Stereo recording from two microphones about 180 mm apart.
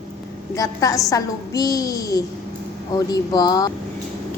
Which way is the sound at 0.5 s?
20° left (ahead or behind).